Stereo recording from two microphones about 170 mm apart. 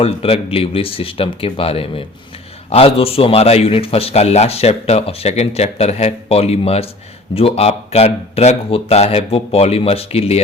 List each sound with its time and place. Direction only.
0.0 s a man's voice: 35° left (ahead or behind)